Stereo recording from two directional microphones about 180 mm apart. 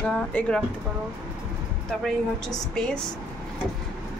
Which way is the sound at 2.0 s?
5° left (ahead or behind).